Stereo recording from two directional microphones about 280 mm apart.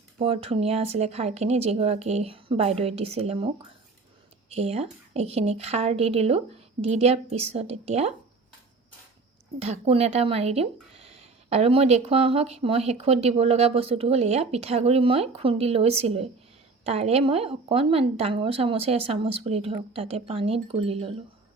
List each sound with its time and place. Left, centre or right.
0.2 s speech: right
4.5 s speech: right
9.6 s speech: right